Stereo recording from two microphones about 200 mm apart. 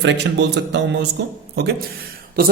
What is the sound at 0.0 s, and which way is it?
A man's voice, 60° right (ahead or behind).